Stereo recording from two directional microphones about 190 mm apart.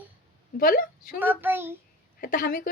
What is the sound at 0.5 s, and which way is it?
Speech, 50° left (ahead or behind).